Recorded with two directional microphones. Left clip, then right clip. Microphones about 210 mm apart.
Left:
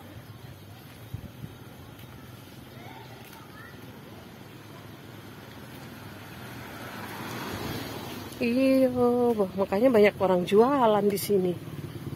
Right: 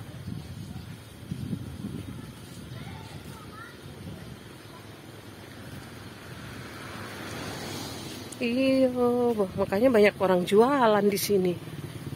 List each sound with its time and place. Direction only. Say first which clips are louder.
6.8 s vehicle: left 1 dB; 60° left (ahead or behind)
8.4 s speech: left 1 dB; 10° left (ahead or behind)
8.9 s speech: left 1 dB; centre (ahead or behind)